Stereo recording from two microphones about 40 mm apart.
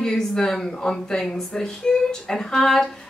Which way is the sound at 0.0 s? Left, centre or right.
Centre.